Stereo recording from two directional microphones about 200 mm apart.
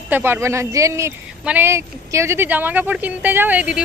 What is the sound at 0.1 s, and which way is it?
Speech, 10° right (ahead or behind).